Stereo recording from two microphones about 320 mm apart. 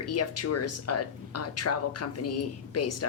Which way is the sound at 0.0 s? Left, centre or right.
Left.